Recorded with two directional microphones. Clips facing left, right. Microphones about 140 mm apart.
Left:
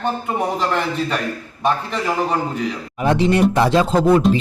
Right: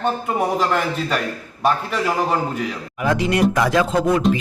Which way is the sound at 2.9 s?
30° left (ahead or behind).